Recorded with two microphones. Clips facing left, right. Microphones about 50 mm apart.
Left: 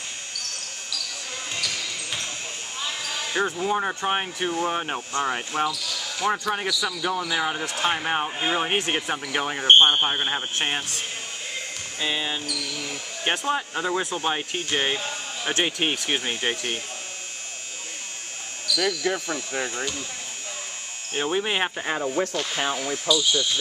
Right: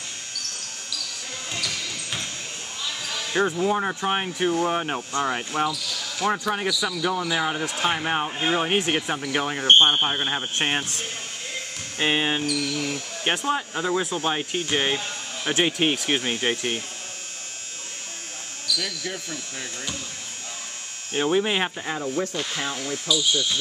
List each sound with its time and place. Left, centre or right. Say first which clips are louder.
2.8 s basketball bounce: left 1 dB; centre
3.5 s speech: right 1 dB; centre
12.0 s speech: right 5 dB; right
12.6 s speech: right 4 dB; centre
15.0 s a sound: left 1 dB; centre
15.5 s speech: right 3 dB; centre
18.7 s basketball bounce: left 3 dB; centre
19.1 s speech: left 7 dB; left
21.1 s speech: right 3 dB; centre
21.8 s speech: left 2 dB; left